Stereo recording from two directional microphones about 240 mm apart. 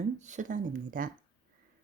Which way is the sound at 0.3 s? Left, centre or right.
Right.